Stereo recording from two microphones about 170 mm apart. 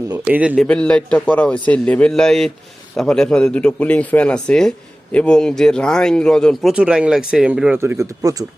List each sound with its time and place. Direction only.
0.3 s a man's voice: 5° right (ahead or behind)
7.8 s speech: 15° right (ahead or behind)